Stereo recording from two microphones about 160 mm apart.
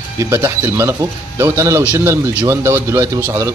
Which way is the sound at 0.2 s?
15° right (ahead or behind).